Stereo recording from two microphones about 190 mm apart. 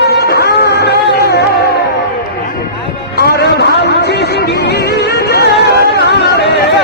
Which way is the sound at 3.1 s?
55° left (ahead or behind).